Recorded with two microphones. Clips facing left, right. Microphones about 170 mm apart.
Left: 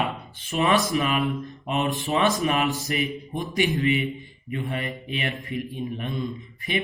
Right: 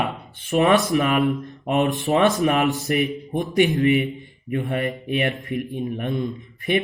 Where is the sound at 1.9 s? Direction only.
60° right (ahead or behind).